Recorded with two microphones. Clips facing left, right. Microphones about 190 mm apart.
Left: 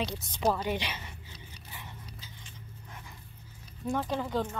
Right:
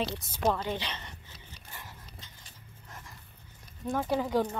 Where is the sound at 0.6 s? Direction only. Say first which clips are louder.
Left 2 dB; 10° left (ahead or behind).